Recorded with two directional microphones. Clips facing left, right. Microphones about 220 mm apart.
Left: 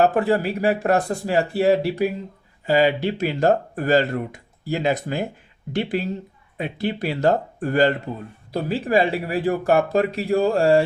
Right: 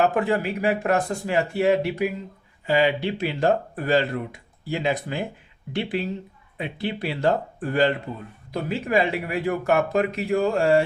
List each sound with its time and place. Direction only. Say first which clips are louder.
0.0 s speech: left 3 dB; 35° left (ahead or behind)